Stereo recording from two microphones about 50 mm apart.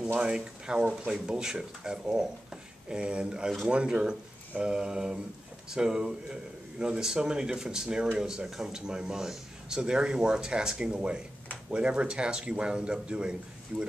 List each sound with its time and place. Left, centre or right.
0.1 s speech: centre